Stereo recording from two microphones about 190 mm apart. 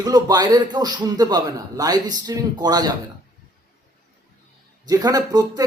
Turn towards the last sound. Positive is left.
turn(degrees=-20)  # may be behind; listen again after turning